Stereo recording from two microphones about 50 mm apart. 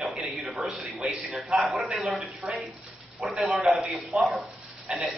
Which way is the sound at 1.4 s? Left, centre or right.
Centre.